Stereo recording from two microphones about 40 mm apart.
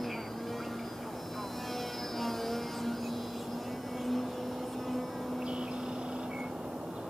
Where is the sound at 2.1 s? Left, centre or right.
Centre.